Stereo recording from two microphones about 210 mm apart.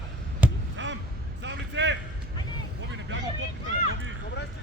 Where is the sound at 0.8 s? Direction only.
65° right (ahead or behind).